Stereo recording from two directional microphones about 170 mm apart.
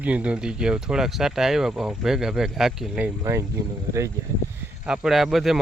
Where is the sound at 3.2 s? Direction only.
20° right (ahead or behind).